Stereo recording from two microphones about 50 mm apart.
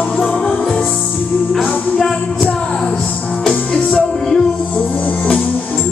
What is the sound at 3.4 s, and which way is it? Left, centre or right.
Music, centre.